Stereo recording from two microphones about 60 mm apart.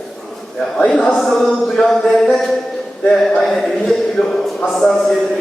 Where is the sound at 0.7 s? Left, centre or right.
Centre.